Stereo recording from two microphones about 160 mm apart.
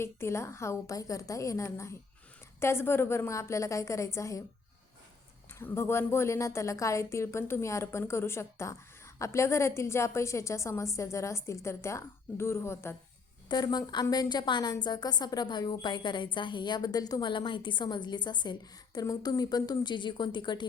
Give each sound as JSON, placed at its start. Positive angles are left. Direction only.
{"t": 0.0, "sound": "a woman's voice", "side_deg": 15}
{"t": 5.5, "sound": "a woman's voice", "side_deg": 15}
{"t": 13.5, "sound": "a woman's voice", "side_deg": 25}